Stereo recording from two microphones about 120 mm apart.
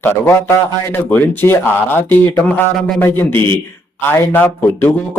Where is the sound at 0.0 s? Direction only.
20° left (ahead or behind).